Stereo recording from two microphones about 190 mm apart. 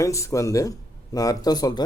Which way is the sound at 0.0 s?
15° left (ahead or behind).